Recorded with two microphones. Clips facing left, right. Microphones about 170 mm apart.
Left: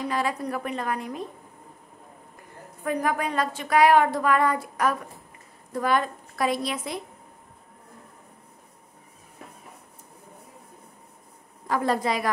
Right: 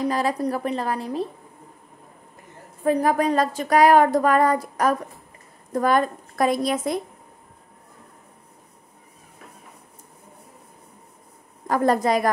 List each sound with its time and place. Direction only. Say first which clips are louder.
0.0 s a woman's voice: right 5 dB; 35° right (ahead or behind)
2.8 s a woman's voice: right 6 dB; 35° right (ahead or behind)
11.6 s a woman's voice: right 5 dB; 45° right (ahead or behind)